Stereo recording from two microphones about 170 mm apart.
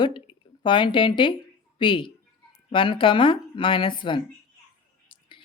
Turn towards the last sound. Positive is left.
turn(degrees=30)  # may be behind; listen again after turning